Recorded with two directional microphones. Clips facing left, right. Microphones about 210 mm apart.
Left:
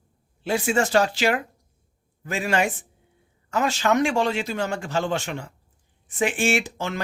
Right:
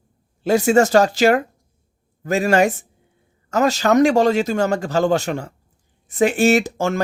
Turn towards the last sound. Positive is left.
turn(degrees=-45)  # may be behind; listen again after turning